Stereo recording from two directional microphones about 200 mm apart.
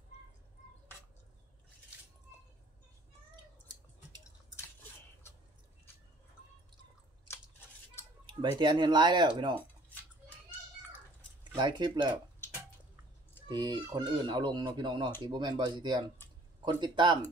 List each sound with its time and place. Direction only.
8.3 s speech: 20° right (ahead or behind)
11.5 s speech: 20° right (ahead or behind)
12.4 s drip: 10° left (ahead or behind)
13.5 s speech: 20° right (ahead or behind)